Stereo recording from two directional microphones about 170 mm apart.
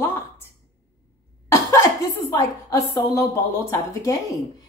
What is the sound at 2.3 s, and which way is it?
A woman's voice, 20° left (ahead or behind).